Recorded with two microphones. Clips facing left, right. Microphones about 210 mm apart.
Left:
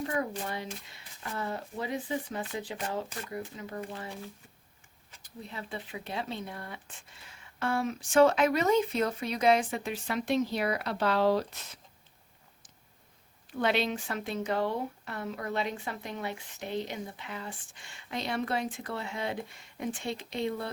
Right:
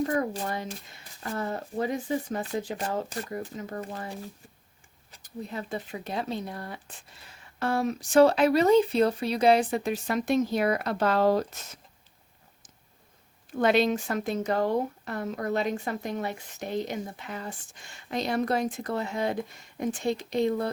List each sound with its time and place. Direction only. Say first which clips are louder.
0.0 s speech: right 5 dB; 40° right (ahead or behind)
5.1 s speech: right 7 dB; 45° right (ahead or behind)
13.6 s speech: right 6 dB; 45° right (ahead or behind)